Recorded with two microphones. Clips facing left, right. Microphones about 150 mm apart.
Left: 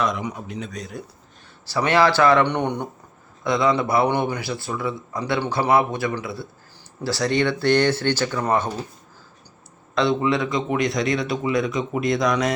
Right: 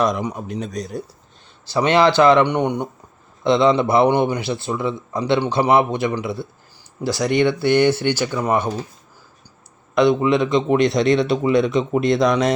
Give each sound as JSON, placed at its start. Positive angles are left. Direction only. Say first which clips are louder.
{"t": 0.0, "sound": "speech", "louder": "right 4 dB", "side_deg": -40}
{"t": 1.6, "sound": "a man's voice", "louder": "right 3 dB", "side_deg": -20}
{"t": 3.4, "sound": "a man's voice", "louder": "right 5 dB", "side_deg": -25}
{"t": 9.9, "sound": "a man's voice", "louder": "right 5 dB", "side_deg": -15}